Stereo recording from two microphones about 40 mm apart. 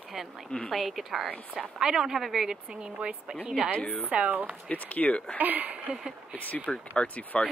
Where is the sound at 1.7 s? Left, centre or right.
Centre.